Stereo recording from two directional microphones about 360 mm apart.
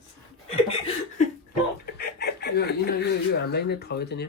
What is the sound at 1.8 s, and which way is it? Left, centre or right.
Speech, left.